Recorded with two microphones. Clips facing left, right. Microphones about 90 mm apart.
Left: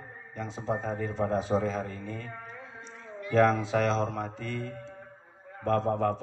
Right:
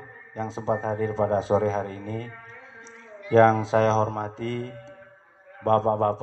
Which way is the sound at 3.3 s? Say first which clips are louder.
Right 6 dB; 35° right (ahead or behind).